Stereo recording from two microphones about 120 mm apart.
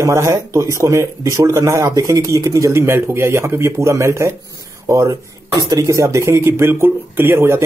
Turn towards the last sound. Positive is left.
turn(degrees=-20)  # may be behind; listen again after turning